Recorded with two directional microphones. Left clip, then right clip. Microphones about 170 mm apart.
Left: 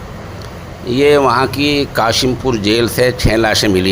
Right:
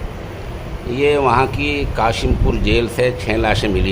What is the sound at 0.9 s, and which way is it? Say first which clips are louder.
Speech: left 4 dB; 30° left (ahead or behind).